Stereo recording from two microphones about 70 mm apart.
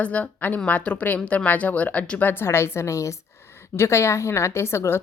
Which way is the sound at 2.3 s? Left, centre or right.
Left.